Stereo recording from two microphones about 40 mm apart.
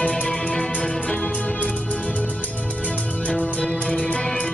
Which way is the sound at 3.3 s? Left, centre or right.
Left.